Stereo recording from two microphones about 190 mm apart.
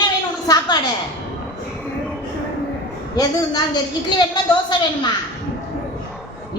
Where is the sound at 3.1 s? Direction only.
20° left (ahead or behind).